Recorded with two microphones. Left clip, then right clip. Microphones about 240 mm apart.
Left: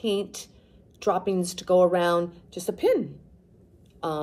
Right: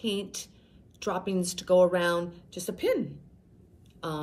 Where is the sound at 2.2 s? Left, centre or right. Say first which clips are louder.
Left 6 dB; centre.